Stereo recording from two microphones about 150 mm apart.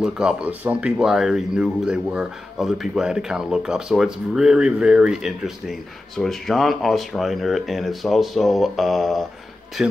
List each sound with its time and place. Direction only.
0.0 s speech: 5° right (ahead or behind)